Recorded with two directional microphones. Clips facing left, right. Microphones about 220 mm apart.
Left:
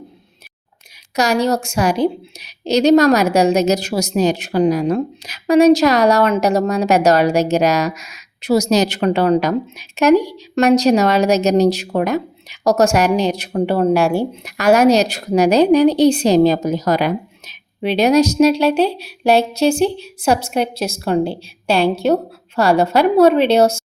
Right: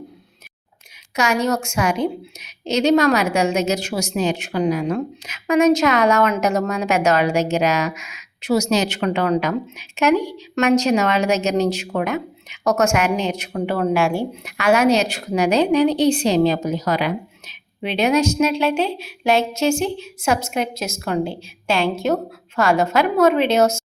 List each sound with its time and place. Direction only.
1.1 s a woman's voice: 35° left (ahead or behind)